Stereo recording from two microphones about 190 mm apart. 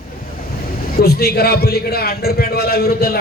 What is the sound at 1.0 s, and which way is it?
A man's voice, 55° left (ahead or behind).